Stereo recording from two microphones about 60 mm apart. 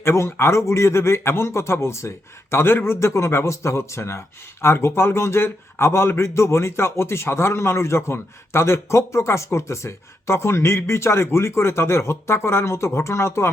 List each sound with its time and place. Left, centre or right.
0.0 s a man's voice: left